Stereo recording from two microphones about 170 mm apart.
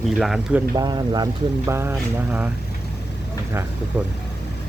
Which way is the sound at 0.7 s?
25° right (ahead or behind).